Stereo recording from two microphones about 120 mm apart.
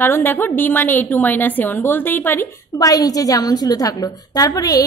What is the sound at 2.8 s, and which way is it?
A woman's voice, 30° left (ahead or behind).